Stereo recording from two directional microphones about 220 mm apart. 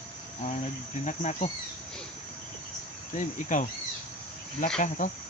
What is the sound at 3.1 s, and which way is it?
Speech, 35° left (ahead or behind).